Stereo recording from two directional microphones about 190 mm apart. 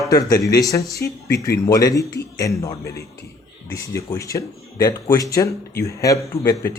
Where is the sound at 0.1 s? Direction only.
20° left (ahead or behind).